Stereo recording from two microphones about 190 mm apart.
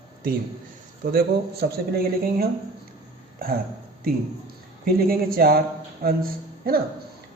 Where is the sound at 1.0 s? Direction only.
55° right (ahead or behind).